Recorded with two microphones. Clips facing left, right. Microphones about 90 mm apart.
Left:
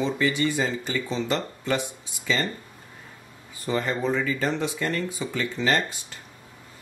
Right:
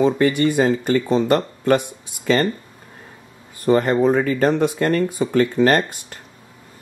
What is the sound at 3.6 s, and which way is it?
Speech, 55° right (ahead or behind).